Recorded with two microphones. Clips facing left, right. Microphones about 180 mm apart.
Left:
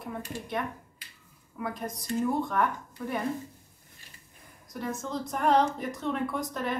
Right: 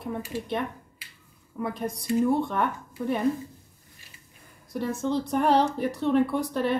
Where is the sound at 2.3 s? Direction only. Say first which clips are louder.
Right 3 dB; 25° right (ahead or behind).